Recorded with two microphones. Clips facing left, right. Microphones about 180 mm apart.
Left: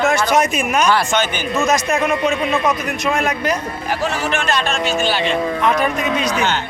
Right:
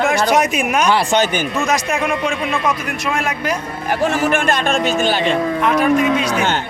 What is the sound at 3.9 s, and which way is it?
Speech, 50° right (ahead or behind).